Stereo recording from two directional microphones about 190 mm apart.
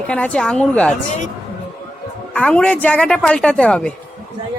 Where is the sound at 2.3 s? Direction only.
5° left (ahead or behind).